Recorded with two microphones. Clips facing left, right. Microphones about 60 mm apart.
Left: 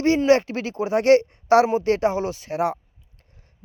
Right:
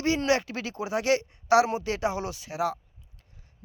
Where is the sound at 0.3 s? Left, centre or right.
Left.